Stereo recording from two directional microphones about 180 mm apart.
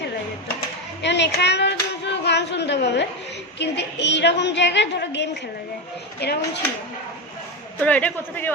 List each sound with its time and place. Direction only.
1.0 s child singing: 75° left (ahead or behind)
3.6 s a woman's voice: 75° left (ahead or behind)
7.8 s a man's voice: 10° left (ahead or behind)